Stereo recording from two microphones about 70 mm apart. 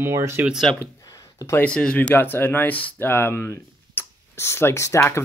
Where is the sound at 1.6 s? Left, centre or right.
Centre.